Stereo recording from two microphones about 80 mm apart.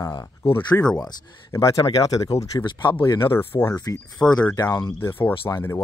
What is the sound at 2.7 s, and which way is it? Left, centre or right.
Speech, left.